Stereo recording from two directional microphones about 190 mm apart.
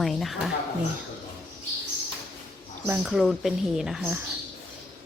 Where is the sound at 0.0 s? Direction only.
Centre (ahead or behind).